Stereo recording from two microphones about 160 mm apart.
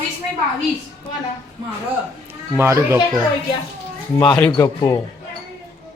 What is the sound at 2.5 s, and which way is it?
Speech, 15° right (ahead or behind).